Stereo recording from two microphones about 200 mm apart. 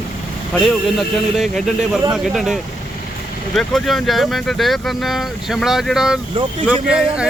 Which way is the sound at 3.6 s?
Centre (ahead or behind).